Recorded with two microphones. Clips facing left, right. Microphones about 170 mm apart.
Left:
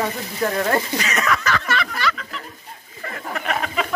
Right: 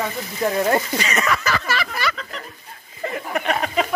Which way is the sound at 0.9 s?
Centre (ahead or behind).